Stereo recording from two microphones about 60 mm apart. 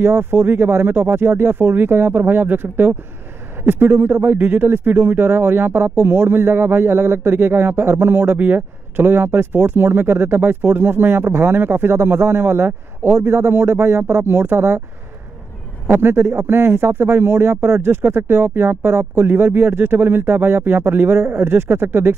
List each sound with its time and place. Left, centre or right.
0.0 s speech: right
15.9 s speech: right